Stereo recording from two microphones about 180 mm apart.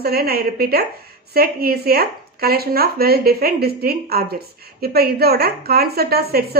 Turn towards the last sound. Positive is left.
turn(degrees=-60)  # may be behind; listen again after turning